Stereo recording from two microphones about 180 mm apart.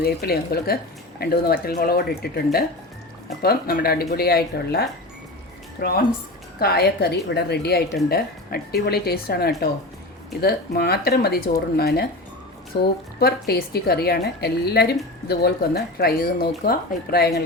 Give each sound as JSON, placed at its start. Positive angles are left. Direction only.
{"t": 0.0, "sound": "a woman's voice", "side_deg": 60}